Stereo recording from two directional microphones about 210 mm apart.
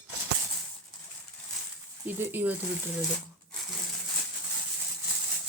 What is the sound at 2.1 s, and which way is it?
Speech, 10° right (ahead or behind).